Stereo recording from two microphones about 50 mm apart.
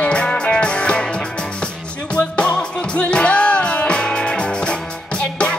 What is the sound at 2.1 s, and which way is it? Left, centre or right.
Music, left.